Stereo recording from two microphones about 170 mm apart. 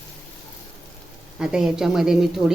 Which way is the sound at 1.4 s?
5° right (ahead or behind).